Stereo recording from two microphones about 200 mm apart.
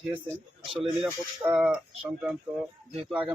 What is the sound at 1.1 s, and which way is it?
Speech, 5° right (ahead or behind).